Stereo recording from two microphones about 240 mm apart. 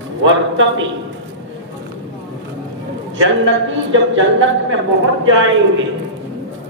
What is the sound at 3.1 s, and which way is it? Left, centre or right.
A man's voice, right.